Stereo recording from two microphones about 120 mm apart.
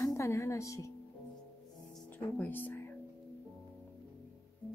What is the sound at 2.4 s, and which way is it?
Speech, 15° left (ahead or behind).